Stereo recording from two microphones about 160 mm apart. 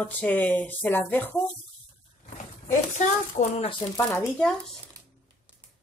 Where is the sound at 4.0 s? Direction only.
20° left (ahead or behind).